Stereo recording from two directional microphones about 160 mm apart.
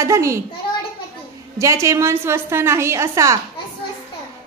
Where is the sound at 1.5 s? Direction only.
20° right (ahead or behind).